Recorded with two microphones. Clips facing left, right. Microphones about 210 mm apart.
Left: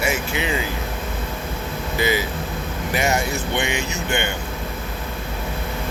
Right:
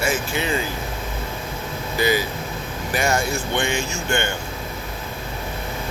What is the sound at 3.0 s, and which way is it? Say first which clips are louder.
Speech: even; 20° left (ahead or behind).